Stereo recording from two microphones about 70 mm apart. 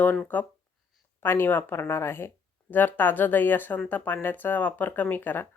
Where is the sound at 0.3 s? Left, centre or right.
Left.